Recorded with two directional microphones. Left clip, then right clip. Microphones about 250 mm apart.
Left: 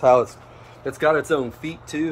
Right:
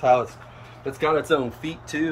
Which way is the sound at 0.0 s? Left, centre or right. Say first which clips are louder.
Left 3 dB; centre.